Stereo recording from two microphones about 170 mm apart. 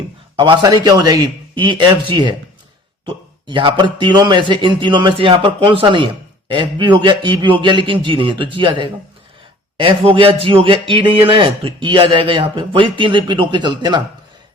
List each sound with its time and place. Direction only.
0.3 s a man's voice: 25° right (ahead or behind)